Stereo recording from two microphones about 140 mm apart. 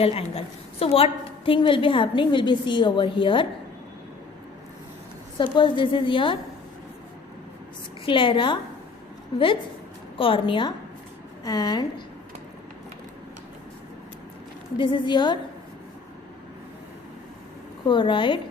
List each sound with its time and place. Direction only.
0.0 s a woman's voice: 45° left (ahead or behind)
5.4 s a woman's voice: 35° left (ahead or behind)
8.0 s a woman's voice: 35° left (ahead or behind)
14.8 s a woman's voice: 35° left (ahead or behind)
17.8 s a woman's voice: 35° left (ahead or behind)